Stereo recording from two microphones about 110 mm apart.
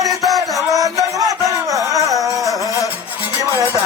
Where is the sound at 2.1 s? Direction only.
Centre (ahead or behind).